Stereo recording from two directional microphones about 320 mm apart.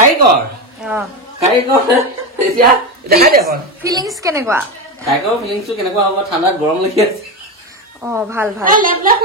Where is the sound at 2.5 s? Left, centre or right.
Right.